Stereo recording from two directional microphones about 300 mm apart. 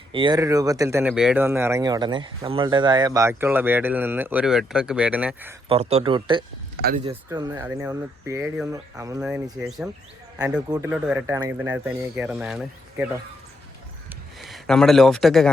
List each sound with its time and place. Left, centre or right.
0.1 s speech: centre
5.6 s speech: centre
10.3 s speech: centre
14.4 s a man's voice: centre